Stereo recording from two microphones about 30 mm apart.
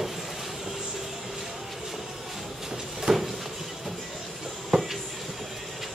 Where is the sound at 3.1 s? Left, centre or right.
Right.